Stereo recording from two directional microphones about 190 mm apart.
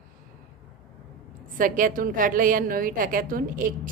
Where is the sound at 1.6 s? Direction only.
45° right (ahead or behind).